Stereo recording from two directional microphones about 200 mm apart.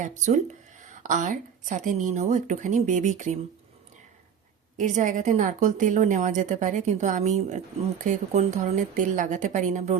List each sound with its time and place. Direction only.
0.0 s a woman's voice: 40° right (ahead or behind)
4.8 s a woman's voice: 40° right (ahead or behind)